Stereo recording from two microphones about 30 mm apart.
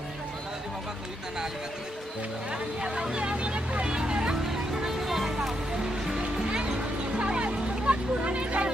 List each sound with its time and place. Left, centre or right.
2.5 s speech: right
3.8 s vehicle: right
4.4 s speech: centre
5.8 s speech: right
7.2 s music: right